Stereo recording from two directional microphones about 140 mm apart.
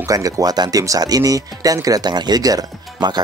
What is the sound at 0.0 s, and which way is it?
Speech, 25° right (ahead or behind).